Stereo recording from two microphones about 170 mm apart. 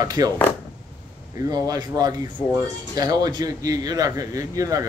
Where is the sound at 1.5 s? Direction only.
20° right (ahead or behind).